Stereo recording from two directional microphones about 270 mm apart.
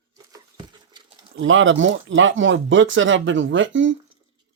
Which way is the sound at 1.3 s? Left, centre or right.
Right.